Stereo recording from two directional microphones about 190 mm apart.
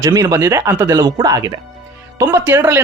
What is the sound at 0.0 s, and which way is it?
Speech, 20° right (ahead or behind).